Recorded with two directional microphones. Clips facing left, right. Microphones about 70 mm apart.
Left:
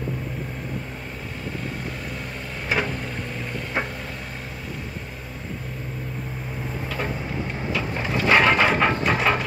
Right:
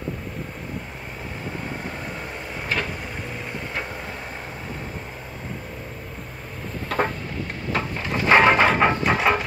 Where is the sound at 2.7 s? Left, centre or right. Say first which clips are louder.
Left 2 dB; centre.